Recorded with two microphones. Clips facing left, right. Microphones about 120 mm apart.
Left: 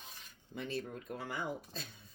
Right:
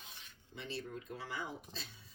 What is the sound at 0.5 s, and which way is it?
Cutlery, 50° left (ahead or behind).